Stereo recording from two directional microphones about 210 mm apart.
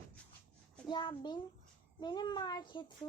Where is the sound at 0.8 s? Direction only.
20° left (ahead or behind).